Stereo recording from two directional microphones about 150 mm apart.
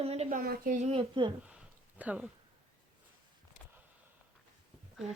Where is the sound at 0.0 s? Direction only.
45° right (ahead or behind).